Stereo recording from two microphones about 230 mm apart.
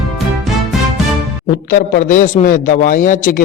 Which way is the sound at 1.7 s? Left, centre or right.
Left.